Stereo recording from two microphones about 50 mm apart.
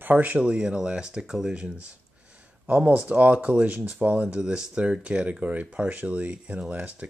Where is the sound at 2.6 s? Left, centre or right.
Right.